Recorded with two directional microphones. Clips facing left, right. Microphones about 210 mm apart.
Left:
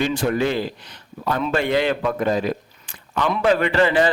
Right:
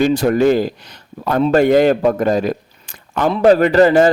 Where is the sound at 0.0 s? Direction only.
40° right (ahead or behind).